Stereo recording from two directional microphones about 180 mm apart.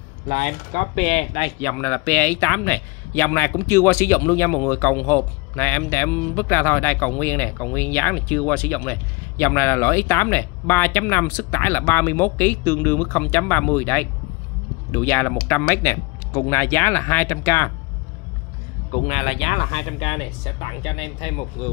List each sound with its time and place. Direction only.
0.3 s speech: 40° left (ahead or behind)
1.6 s a man's voice: 10° left (ahead or behind)
18.9 s speech: 35° left (ahead or behind)